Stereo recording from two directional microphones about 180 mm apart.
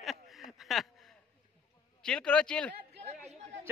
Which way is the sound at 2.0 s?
5° left (ahead or behind).